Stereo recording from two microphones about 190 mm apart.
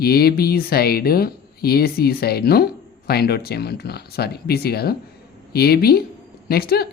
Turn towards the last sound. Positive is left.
turn(degrees=55)  # may be behind; listen again after turning